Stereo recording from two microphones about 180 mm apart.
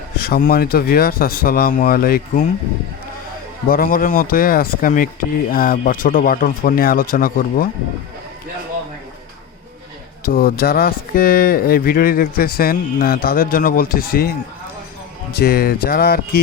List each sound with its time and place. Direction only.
0.2 s speech: 55° left (ahead or behind)
3.7 s speech: 50° left (ahead or behind)
10.2 s speech: 55° left (ahead or behind)
15.4 s speech: 60° left (ahead or behind)